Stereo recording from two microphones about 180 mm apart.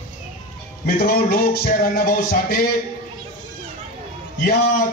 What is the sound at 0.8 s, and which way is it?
Music, 60° left (ahead or behind).